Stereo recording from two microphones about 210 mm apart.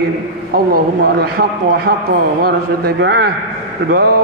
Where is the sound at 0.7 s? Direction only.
45° right (ahead or behind).